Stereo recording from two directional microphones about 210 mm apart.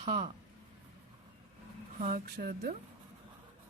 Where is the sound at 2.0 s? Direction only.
40° right (ahead or behind).